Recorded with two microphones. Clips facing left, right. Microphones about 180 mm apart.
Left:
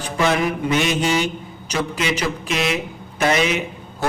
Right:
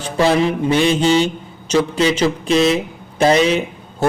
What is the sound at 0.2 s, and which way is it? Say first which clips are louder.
A man's voice: right 5 dB; 30° right (ahead or behind).